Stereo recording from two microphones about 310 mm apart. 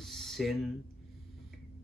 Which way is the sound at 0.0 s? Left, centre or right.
Centre.